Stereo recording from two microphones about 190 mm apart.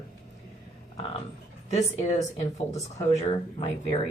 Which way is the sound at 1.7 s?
35° left (ahead or behind).